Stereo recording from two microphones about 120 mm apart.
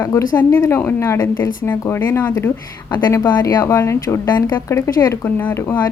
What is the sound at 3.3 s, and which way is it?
Speech, 30° left (ahead or behind).